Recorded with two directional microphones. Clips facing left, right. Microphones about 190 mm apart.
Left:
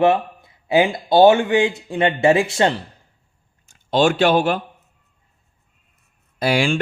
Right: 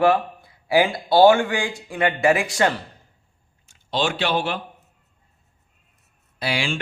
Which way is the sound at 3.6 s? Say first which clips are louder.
Left 7 dB; 50° left (ahead or behind).